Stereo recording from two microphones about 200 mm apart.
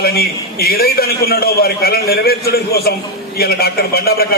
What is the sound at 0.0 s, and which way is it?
A man's voice, 50° left (ahead or behind).